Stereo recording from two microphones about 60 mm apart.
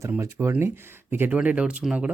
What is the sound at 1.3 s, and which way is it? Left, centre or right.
Speech, right.